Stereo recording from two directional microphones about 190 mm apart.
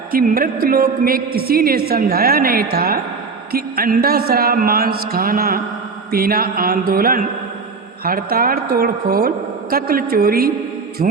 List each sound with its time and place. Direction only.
0.1 s a man's voice: 50° right (ahead or behind)
11.0 s a man's voice: 40° right (ahead or behind)